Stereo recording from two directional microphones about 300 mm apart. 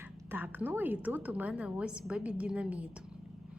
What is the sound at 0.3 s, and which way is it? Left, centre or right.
A woman's voice, centre.